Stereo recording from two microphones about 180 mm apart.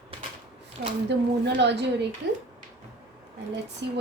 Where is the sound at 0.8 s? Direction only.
65° right (ahead or behind).